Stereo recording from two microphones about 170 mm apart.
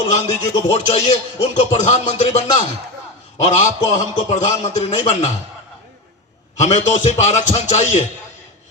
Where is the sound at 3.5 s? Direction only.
45° left (ahead or behind).